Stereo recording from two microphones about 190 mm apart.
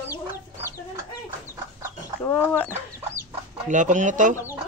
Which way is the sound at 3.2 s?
40° right (ahead or behind).